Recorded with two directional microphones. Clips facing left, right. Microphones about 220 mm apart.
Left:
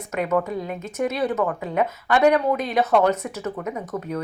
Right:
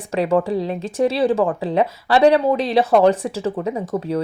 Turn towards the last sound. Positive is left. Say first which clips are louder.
# right 6 dB
turn(degrees=-30)  # may be behind; listen again after turning